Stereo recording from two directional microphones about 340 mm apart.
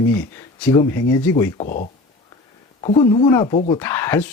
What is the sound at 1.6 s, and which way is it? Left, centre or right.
Speech, left.